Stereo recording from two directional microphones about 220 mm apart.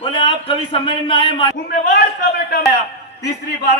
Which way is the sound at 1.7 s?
45° left (ahead or behind).